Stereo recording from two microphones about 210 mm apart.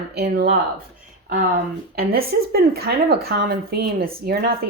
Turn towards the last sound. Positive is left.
turn(degrees=-45)  # may be behind; listen again after turning